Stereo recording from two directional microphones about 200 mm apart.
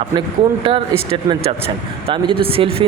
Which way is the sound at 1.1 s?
25° right (ahead or behind).